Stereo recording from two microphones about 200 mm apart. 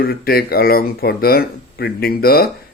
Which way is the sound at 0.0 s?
50° left (ahead or behind).